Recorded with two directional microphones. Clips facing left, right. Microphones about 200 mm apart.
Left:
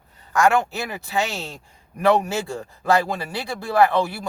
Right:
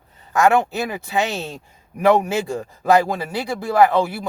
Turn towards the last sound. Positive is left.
turn(degrees=-15)  # may be behind; listen again after turning